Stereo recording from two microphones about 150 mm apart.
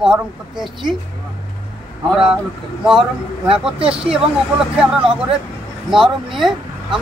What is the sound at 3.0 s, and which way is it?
Speech, 35° right (ahead or behind).